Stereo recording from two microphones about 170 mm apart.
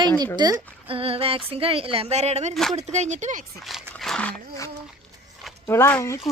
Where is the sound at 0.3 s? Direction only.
25° right (ahead or behind); by 3.4 s 45° right (ahead or behind).